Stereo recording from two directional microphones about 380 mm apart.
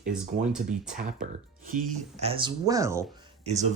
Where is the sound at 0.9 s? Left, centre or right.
Right.